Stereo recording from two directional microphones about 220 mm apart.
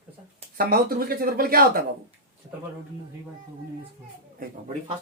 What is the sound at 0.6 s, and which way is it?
Speech, 45° right (ahead or behind).